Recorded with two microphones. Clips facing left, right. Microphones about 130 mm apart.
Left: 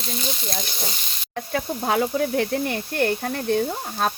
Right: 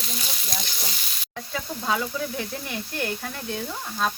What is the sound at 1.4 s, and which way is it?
Speech, 50° left (ahead or behind).